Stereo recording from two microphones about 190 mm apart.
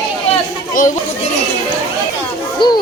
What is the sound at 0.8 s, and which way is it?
Speech, 45° left (ahead or behind).